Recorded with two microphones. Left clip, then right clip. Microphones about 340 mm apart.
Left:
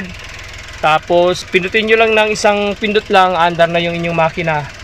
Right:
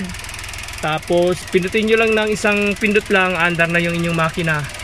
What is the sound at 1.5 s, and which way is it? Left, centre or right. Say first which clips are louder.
Speech: left 4 dB; centre.